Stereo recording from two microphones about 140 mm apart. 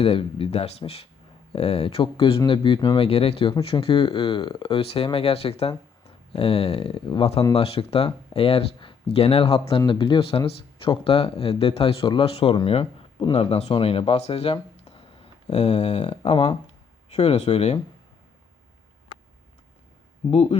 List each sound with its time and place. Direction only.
0.0 s speech: 40° left (ahead or behind)
20.3 s speech: 45° left (ahead or behind)